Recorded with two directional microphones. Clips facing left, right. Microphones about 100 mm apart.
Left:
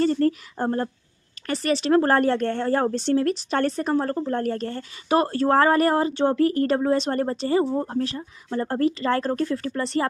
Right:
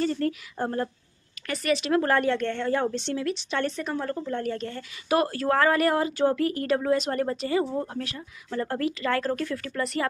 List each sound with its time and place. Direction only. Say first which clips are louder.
0.0 s speech: left 6 dB; 40° left (ahead or behind)